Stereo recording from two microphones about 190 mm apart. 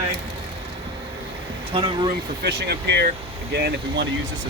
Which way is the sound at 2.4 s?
60° right (ahead or behind).